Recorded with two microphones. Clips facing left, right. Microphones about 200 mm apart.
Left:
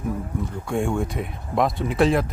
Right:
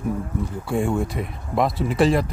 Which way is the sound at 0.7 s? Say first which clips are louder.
Right 1 dB; centre (ahead or behind).